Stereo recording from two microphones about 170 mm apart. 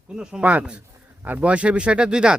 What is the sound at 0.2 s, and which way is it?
Speech, 5° right (ahead or behind).